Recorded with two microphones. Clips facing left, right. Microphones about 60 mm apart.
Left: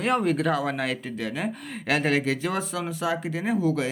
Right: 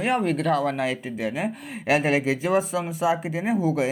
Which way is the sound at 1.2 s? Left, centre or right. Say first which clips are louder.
Right 2 dB; centre.